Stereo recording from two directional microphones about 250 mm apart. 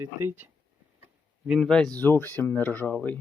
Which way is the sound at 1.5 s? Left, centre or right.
Centre.